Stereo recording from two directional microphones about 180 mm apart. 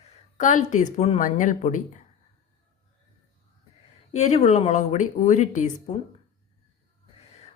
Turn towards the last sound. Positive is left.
turn(degrees=40)  # may be behind; listen again after turning